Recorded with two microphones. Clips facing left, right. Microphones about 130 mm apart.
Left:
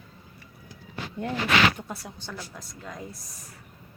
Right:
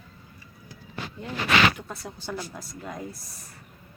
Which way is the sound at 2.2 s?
10° right (ahead or behind).